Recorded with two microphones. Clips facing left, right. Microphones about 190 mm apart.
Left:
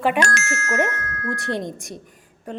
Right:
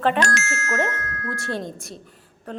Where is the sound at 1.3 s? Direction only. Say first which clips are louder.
Left 3 dB; 15° left (ahead or behind).